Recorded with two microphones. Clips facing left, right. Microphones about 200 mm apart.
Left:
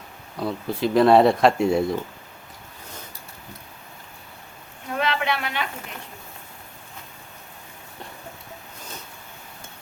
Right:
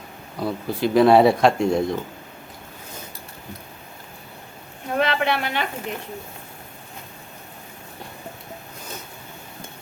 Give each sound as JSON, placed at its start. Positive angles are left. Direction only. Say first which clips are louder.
{"t": 0.3, "sound": "speech", "louder": "right 1 dB", "side_deg": 0}
{"t": 4.9, "sound": "a woman's voice", "louder": "right 3 dB", "side_deg": -40}